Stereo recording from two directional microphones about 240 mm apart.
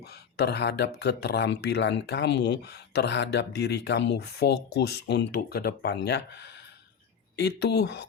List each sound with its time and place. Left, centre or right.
0.0 s speech: left